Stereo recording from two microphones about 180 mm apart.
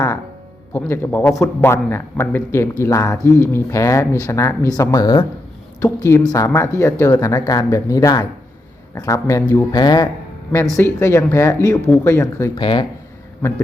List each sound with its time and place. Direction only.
0.7 s speech: 10° left (ahead or behind)
12.5 s speech: 25° left (ahead or behind)